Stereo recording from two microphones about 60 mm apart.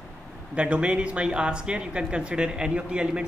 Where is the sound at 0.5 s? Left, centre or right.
Centre.